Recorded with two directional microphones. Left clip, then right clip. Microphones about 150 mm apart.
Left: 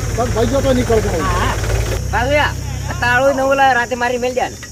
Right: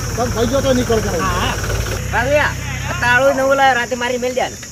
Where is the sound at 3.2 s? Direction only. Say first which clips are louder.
Left 2 dB; 25° left (ahead or behind).